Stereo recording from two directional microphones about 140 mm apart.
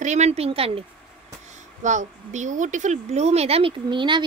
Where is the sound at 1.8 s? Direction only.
60° right (ahead or behind).